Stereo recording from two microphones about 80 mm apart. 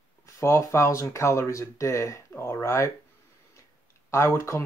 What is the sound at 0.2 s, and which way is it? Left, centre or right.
Speech, left.